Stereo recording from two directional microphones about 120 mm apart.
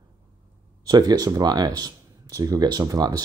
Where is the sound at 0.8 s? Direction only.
30° right (ahead or behind).